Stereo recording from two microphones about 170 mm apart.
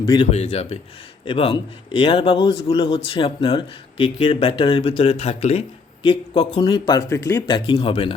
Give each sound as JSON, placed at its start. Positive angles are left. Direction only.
{"t": 0.0, "sound": "a man's voice", "side_deg": 30}